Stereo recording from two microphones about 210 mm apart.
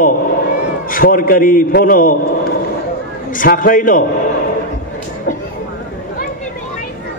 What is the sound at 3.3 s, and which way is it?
Speech, 40° left (ahead or behind).